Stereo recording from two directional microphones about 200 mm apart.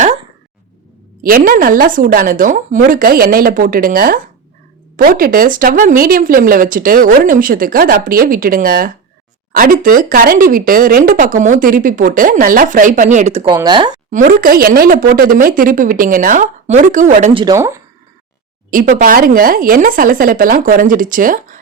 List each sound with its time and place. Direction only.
1.2 s speech: 45° right (ahead or behind)
13.6 s speech: 20° right (ahead or behind)
14.1 s speech: 40° right (ahead or behind)
17.3 s speech: 20° right (ahead or behind)
18.7 s speech: 40° right (ahead or behind)